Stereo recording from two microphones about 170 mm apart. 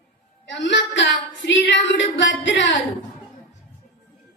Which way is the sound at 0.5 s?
90° left.